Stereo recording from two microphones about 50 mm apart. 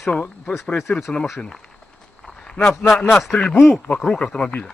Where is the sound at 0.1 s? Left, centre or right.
Left.